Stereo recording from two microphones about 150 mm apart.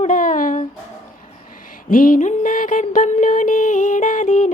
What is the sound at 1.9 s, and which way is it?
Music, 65° left (ahead or behind).